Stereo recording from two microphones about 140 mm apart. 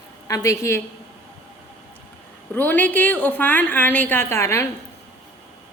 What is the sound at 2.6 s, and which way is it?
A woman's voice, 10° left (ahead or behind).